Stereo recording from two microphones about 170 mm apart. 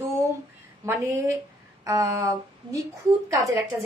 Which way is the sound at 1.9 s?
20° right (ahead or behind).